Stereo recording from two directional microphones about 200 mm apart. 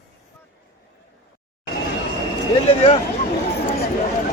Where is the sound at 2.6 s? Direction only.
30° left (ahead or behind).